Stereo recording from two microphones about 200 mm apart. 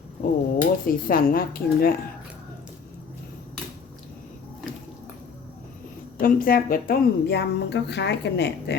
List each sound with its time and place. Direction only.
0.6 s speech: 45° left (ahead or behind)
6.1 s a woman's voice: 45° left (ahead or behind)